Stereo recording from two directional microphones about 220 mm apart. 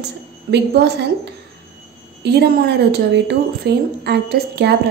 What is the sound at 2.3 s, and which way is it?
A woman's voice, 50° right (ahead or behind).